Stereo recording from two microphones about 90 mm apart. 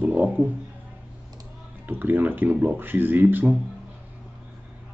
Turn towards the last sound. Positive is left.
turn(degrees=-20)  # may be behind; listen again after turning